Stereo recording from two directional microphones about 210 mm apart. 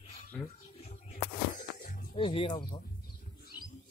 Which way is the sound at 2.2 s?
25° left (ahead or behind).